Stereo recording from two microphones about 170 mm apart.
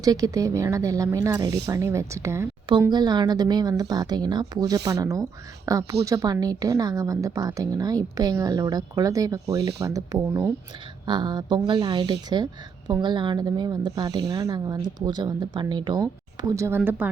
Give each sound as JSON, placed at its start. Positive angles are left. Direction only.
{"t": 0.0, "sound": "speech", "side_deg": -20}